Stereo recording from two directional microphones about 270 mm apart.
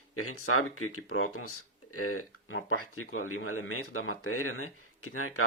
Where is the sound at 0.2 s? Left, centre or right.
Left.